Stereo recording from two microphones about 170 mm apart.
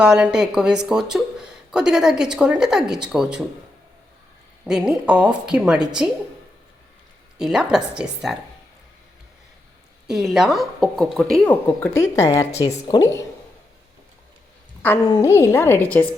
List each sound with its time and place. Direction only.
0.0 s speech: 5° right (ahead or behind)
4.6 s speech: 5° right (ahead or behind)
7.3 s speech: 5° right (ahead or behind)
10.1 s speech: centre (ahead or behind)
11.6 s speech: 15° left (ahead or behind)
15.4 s speech: 15° left (ahead or behind)